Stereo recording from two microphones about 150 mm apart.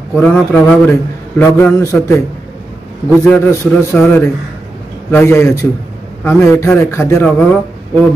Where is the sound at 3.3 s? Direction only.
15° left (ahead or behind).